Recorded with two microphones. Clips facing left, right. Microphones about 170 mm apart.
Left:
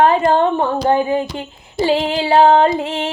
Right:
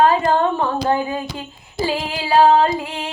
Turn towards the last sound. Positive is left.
turn(degrees=25)  # may be behind; listen again after turning